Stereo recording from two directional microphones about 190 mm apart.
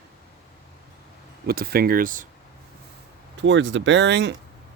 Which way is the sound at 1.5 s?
55° right (ahead or behind).